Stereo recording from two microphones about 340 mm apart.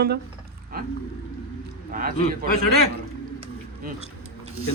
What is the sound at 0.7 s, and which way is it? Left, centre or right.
A man's voice, right.